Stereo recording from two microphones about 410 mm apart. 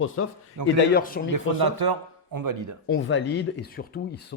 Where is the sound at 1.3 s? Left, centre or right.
Right.